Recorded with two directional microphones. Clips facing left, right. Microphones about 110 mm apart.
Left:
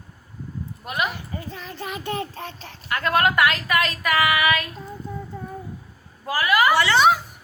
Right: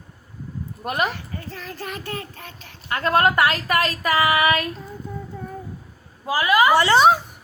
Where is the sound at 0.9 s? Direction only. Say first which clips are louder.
Right 3 dB; 45° right (ahead or behind).